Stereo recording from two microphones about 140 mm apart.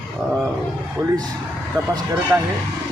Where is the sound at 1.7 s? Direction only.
25° right (ahead or behind).